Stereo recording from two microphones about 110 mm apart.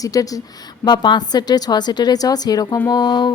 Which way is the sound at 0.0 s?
30° left (ahead or behind).